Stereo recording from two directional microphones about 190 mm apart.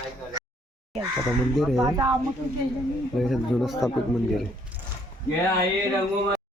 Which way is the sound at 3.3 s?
Centre (ahead or behind).